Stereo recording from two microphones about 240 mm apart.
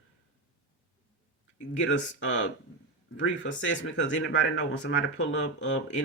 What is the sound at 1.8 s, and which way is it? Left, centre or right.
Speech, left.